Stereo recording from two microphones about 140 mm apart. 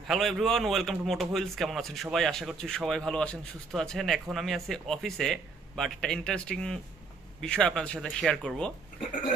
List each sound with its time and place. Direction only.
0.1 s a man's voice: centre (ahead or behind)